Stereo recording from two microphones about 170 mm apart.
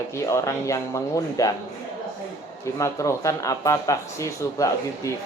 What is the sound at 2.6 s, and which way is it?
Speech, 15° left (ahead or behind).